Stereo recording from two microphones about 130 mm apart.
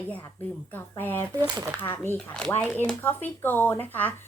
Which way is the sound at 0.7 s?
15° left (ahead or behind).